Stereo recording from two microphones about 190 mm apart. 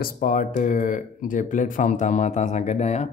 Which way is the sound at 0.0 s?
45° left (ahead or behind).